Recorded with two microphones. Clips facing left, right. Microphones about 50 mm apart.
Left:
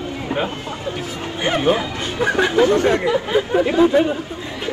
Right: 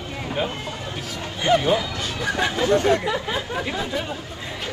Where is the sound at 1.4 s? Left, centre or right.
Left.